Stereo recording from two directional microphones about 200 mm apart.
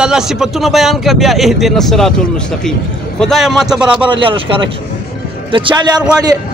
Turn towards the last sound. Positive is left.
turn(degrees=-5)  # may be behind; listen again after turning